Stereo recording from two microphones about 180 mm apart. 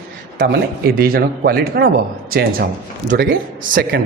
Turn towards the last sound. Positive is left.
turn(degrees=-50)  # may be behind; listen again after turning